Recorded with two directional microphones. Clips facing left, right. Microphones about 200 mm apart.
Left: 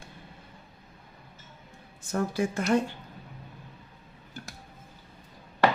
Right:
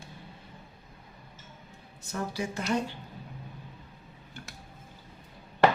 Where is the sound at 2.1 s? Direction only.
50° left (ahead or behind).